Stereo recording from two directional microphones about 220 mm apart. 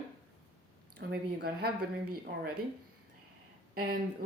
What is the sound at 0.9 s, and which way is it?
Speech, 45° right (ahead or behind).